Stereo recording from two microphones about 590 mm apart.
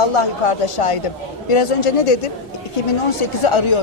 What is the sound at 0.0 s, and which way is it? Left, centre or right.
A woman's voice, left.